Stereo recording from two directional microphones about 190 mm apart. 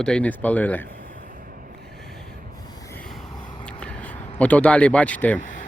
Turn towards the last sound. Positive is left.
turn(degrees=5)  # may be behind; listen again after turning